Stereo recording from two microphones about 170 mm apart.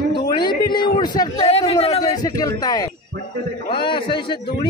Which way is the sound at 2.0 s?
20° left (ahead or behind).